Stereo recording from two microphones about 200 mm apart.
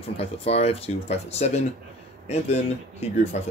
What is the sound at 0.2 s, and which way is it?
Speech, 30° left (ahead or behind).